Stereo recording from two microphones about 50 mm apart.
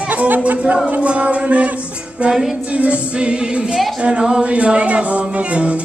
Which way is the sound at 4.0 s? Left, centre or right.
Centre.